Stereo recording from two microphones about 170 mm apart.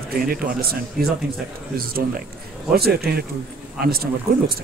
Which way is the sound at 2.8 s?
65° right (ahead or behind).